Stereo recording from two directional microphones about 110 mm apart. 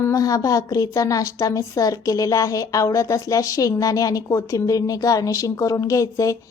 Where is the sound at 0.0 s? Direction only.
30° left (ahead or behind).